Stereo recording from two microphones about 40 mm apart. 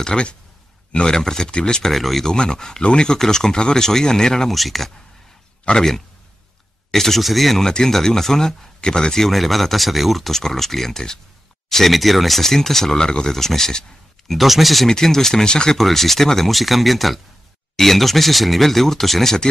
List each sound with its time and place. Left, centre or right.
0.0 s speech: left
1.9 s speech: centre
2.2 s speech: centre
4.5 s speech: centre
5.7 s speech: left
6.9 s speech: centre
7.6 s speech: centre
9.3 s speech: centre
11.7 s speech: centre
14.3 s speech: centre
14.9 s speech: centre
15.8 s speech: centre